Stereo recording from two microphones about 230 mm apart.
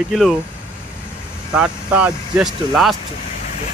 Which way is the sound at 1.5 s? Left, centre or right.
Centre.